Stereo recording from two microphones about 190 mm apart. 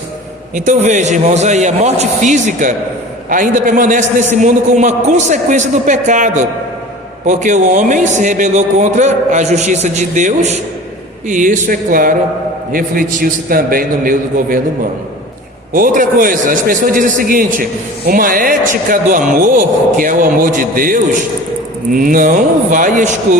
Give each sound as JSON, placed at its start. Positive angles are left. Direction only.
{"t": 0.5, "sound": "a man's voice", "side_deg": -40}
{"t": 15.7, "sound": "a man's voice", "side_deg": -45}